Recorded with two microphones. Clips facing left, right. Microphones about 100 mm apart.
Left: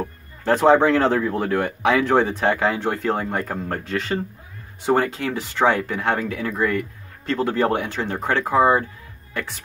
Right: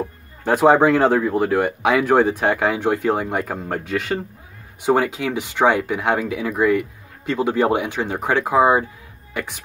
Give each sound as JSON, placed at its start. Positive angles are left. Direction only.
{"t": 0.4, "sound": "speech", "side_deg": -10}